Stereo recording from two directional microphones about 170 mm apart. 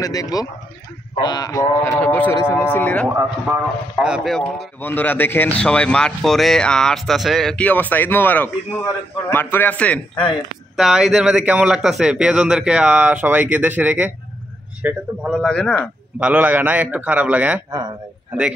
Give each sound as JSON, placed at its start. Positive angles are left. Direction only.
{"t": 0.0, "sound": "speech", "side_deg": 20}
{"t": 3.1, "sound": "a man's voice", "side_deg": -10}
{"t": 4.8, "sound": "speech", "side_deg": 10}
{"t": 10.8, "sound": "a man's voice", "side_deg": 0}
{"t": 15.4, "sound": "a man's voice", "side_deg": 5}
{"t": 16.2, "sound": "a man's voice", "side_deg": -10}